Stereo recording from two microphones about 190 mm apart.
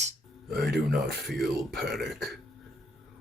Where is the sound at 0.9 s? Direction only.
Centre (ahead or behind).